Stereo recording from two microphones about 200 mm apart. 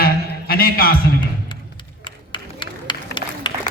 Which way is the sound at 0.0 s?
50° left (ahead or behind).